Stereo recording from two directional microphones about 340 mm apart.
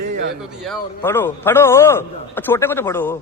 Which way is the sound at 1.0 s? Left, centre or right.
Centre.